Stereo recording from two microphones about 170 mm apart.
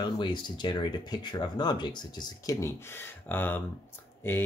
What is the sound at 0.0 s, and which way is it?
Speech, 25° left (ahead or behind).